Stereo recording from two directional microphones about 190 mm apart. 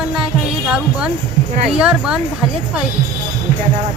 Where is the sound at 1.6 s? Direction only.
5° right (ahead or behind).